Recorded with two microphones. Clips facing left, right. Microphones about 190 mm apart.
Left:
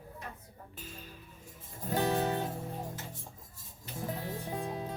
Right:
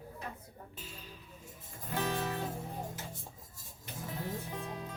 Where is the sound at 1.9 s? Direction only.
35° left (ahead or behind).